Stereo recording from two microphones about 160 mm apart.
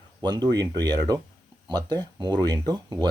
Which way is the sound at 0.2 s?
25° right (ahead or behind).